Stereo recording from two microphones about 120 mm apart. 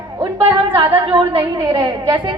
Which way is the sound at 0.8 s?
40° right (ahead or behind).